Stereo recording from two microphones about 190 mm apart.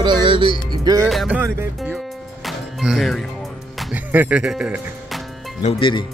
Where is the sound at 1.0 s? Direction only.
Centre (ahead or behind).